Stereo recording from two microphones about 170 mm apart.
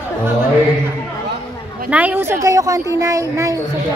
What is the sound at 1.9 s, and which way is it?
A woman's voice, 10° right (ahead or behind).